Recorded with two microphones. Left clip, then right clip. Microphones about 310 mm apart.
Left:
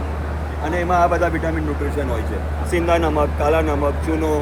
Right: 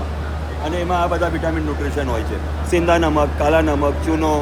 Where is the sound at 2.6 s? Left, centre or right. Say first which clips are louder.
Right 2 dB; right.